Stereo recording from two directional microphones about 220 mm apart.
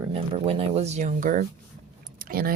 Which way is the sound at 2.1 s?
40° right (ahead or behind).